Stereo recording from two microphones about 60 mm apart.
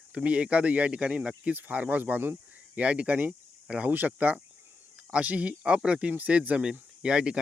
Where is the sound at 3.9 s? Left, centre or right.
Right.